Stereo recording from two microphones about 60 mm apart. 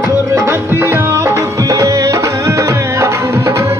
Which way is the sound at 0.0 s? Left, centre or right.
Right.